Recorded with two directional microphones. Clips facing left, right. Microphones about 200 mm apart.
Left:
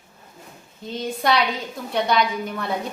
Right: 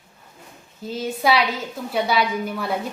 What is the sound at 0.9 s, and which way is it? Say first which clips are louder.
A woman's voice: right 1 dB; 5° right (ahead or behind).